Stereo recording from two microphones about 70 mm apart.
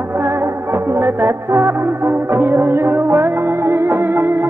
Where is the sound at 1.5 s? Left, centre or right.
Right.